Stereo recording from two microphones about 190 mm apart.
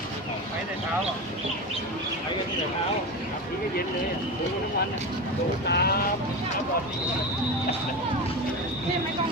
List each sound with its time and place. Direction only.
5.6 s speech: 60° left (ahead or behind)